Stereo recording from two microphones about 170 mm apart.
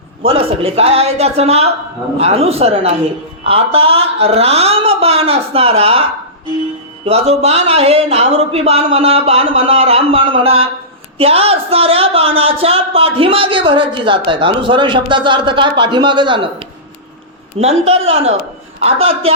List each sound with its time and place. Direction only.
0.2 s speech: 35° right (ahead or behind)
7.0 s speech: 35° right (ahead or behind)